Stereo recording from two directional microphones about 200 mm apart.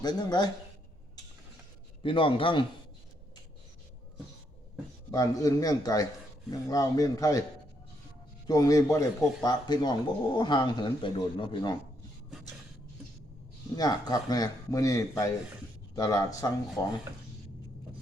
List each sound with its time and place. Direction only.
0.0 s speech: 20° left (ahead or behind)
2.0 s speech: 25° left (ahead or behind)
5.1 s a man's voice: 20° left (ahead or behind)
8.4 s speech: 20° left (ahead or behind)
13.7 s a man's voice: 20° left (ahead or behind)